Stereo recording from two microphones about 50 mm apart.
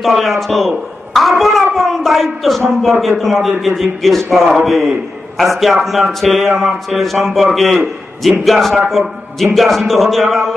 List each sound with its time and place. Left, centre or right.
0.0 s a man's voice: centre